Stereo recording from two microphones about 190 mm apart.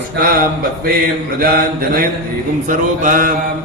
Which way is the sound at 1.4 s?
50° right (ahead or behind).